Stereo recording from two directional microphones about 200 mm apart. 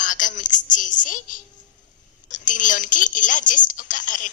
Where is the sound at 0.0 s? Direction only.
40° left (ahead or behind).